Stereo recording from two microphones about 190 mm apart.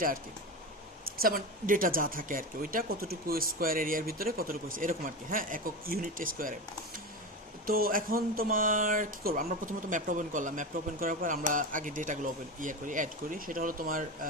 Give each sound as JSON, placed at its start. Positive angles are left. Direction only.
{"t": 1.2, "sound": "speech", "side_deg": -45}